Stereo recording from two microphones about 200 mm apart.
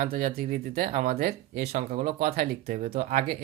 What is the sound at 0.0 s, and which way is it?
Speech, 45° right (ahead or behind).